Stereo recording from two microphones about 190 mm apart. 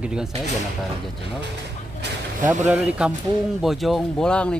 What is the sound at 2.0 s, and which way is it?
Vehicle, 65° right (ahead or behind).